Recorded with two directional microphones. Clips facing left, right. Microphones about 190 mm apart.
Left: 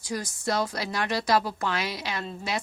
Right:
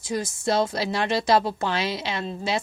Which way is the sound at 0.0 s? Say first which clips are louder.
Right 4 dB; 25° right (ahead or behind).